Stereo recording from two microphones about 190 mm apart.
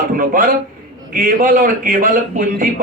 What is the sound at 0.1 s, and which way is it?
A man's voice, 45° right (ahead or behind).